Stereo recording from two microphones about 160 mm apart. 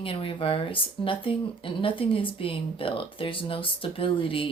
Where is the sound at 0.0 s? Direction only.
35° left (ahead or behind).